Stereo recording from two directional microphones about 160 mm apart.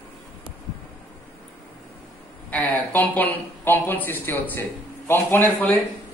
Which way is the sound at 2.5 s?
10° left (ahead or behind).